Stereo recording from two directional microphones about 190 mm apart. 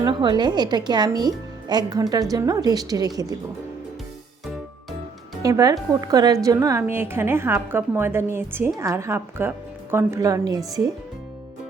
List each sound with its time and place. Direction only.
0.0 s speech: 25° right (ahead or behind)
5.4 s a woman's voice: 20° right (ahead or behind)